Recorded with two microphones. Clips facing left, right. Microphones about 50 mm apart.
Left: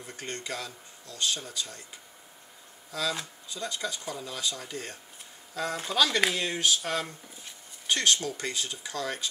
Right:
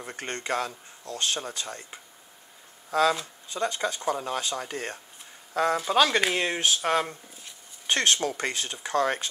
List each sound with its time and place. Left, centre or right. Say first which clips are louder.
0.0 s speech: right 4 dB; right